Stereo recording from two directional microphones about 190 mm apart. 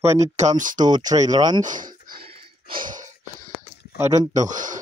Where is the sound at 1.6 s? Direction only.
45° right (ahead or behind).